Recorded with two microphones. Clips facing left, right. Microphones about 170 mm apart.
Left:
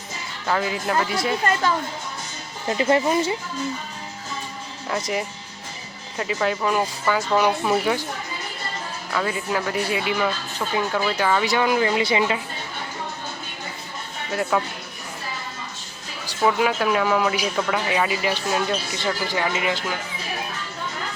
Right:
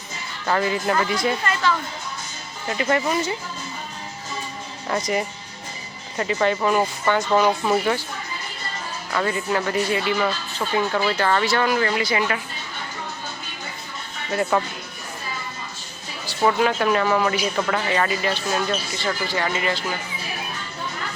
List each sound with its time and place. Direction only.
0.4 s speech: centre (ahead or behind)
2.6 s speech: 25° left (ahead or behind)
4.9 s speech: 5° left (ahead or behind)
9.1 s speech: 5° left (ahead or behind); by 12.4 s 25° left (ahead or behind)
14.5 s speech: 5° left (ahead or behind)
16.2 s speech: 5° left (ahead or behind)